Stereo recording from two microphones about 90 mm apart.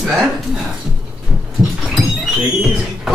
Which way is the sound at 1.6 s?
5° right (ahead or behind).